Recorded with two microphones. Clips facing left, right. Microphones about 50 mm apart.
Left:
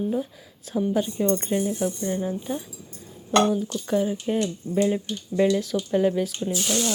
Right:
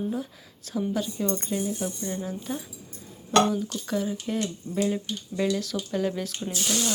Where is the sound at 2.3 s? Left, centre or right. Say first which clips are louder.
Left 4 dB; centre.